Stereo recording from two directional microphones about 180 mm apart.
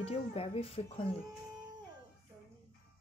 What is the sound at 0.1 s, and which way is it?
Speech, 30° left (ahead or behind).